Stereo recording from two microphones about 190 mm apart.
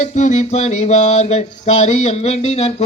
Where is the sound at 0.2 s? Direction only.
35° left (ahead or behind).